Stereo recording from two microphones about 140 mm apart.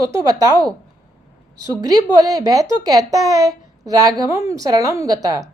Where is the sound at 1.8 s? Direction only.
25° right (ahead or behind).